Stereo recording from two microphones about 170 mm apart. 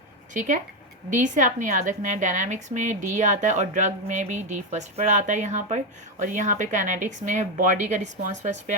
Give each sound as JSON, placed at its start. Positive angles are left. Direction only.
{"t": 0.3, "sound": "a woman's voice", "side_deg": -45}